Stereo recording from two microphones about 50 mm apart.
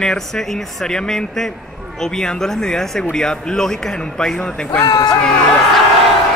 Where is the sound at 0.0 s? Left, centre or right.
Centre.